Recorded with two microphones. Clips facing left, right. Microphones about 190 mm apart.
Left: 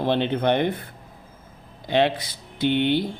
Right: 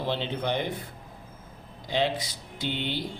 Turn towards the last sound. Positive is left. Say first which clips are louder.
# left 11 dB
turn(degrees=60)  # may be behind; listen again after turning